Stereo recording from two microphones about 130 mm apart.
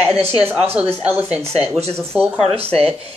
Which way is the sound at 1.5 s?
50° right (ahead or behind).